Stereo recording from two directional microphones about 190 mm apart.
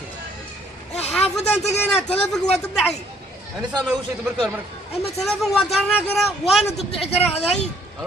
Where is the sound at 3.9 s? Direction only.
5° right (ahead or behind).